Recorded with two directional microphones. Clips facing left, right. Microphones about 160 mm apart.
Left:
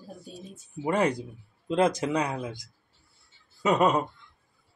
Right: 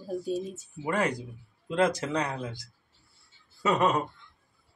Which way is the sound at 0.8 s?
20° left (ahead or behind).